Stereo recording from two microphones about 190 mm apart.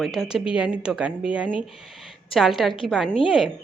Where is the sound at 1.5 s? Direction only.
30° left (ahead or behind).